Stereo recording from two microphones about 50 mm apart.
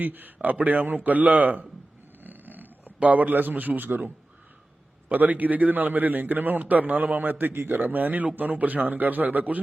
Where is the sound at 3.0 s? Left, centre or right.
Right.